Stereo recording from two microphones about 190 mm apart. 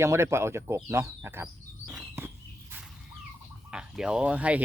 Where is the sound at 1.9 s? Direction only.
10° right (ahead or behind).